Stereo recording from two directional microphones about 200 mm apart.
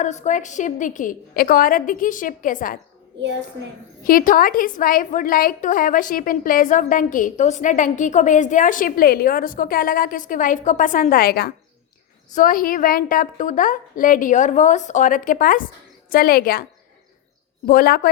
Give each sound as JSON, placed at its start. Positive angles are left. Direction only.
{"t": 0.0, "sound": "a woman's voice", "side_deg": 35}
{"t": 4.0, "sound": "a woman's voice", "side_deg": 45}
{"t": 17.7, "sound": "a woman's voice", "side_deg": 45}